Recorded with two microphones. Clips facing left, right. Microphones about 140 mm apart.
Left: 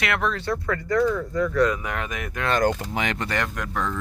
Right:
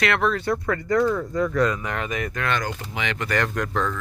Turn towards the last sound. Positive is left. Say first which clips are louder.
# right 3 dB
turn(degrees=10)  # may be behind; listen again after turning